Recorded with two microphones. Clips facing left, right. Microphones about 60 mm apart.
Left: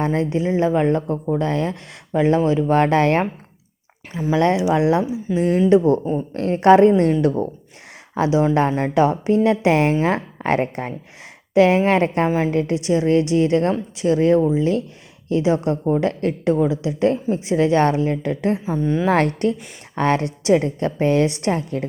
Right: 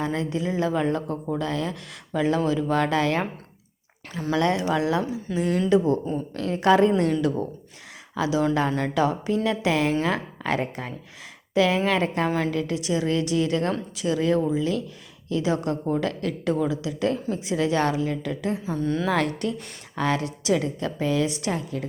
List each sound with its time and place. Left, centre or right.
0.0 s a woman's voice: left
4.1 s speech: centre
4.7 s speech: left
5.4 s a woman's voice: left
18.8 s speech: left
19.0 s a woman's voice: left